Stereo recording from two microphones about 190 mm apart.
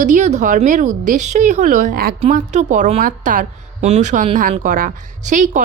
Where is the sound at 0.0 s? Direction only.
40° right (ahead or behind).